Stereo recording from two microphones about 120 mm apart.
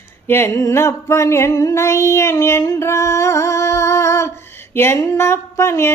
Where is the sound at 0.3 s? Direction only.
20° left (ahead or behind).